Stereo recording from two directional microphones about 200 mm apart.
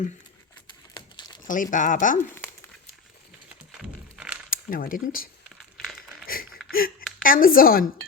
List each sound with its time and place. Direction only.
0.9 s crumpling: 25° left (ahead or behind)
1.5 s speech: 40° left (ahead or behind)
3.7 s a sound: 5° right (ahead or behind)
4.5 s speech: 45° left (ahead or behind)
6.7 s speech: 45° left (ahead or behind)